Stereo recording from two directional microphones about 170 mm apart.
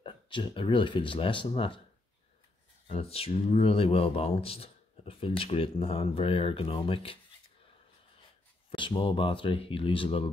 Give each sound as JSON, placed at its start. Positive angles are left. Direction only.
{"t": 0.0, "sound": "speech", "side_deg": 30}
{"t": 2.9, "sound": "speech", "side_deg": 35}
{"t": 8.6, "sound": "speech", "side_deg": 30}